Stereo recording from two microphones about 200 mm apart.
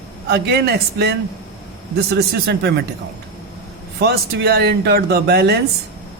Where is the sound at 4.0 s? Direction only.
55° right (ahead or behind).